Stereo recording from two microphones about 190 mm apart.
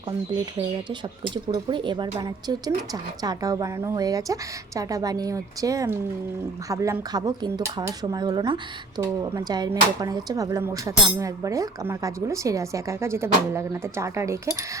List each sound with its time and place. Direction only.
0.5 s speech: 25° right (ahead or behind)